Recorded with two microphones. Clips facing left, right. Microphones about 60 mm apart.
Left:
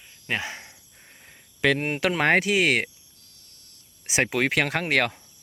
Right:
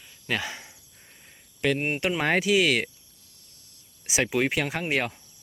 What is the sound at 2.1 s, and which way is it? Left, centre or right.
Speech, left.